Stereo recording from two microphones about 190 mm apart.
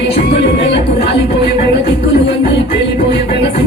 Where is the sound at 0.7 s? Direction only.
30° left (ahead or behind).